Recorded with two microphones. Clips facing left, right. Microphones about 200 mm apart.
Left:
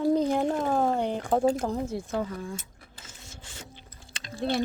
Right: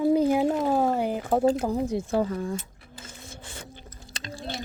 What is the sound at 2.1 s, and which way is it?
Speech, 35° right (ahead or behind).